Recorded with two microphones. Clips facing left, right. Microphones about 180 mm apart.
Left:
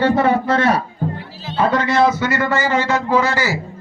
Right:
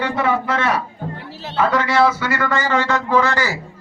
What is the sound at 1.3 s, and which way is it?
Music, 65° right (ahead or behind).